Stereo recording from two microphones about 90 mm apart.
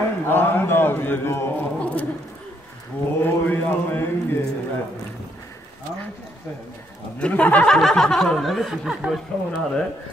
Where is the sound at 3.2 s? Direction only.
20° left (ahead or behind).